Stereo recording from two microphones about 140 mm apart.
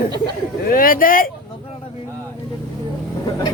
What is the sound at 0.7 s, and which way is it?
Speech, 90° left.